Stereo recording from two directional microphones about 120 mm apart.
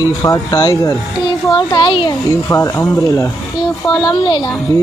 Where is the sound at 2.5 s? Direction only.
25° left (ahead or behind).